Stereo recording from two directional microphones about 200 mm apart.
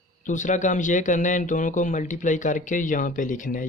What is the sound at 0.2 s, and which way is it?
Speech, 40° left (ahead or behind).